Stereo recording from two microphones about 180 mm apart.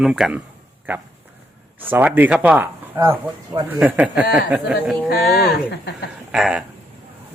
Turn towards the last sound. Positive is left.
turn(degrees=-5)  # may be behind; listen again after turning